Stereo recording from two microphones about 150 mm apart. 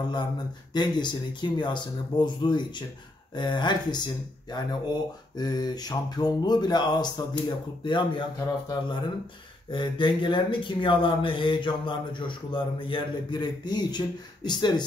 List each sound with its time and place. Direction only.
0.7 s speech: 30° left (ahead or behind)